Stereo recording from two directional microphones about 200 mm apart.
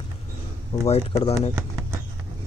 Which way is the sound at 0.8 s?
30° left (ahead or behind).